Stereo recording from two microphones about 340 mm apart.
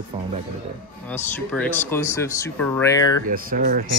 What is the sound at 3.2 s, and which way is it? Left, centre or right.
Speech, right.